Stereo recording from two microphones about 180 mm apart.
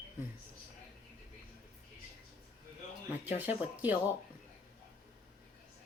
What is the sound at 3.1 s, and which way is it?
Speech, 10° right (ahead or behind).